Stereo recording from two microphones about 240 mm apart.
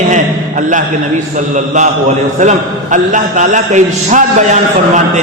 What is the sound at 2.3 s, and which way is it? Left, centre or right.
A man's voice, right.